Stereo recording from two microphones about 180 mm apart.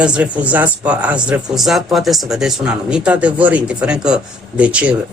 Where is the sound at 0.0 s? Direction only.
5° right (ahead or behind).